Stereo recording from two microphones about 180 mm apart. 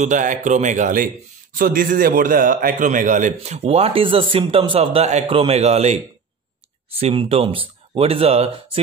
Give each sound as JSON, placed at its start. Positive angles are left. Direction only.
{"t": 0.0, "sound": "a man's voice", "side_deg": -45}
{"t": 7.0, "sound": "speech", "side_deg": -35}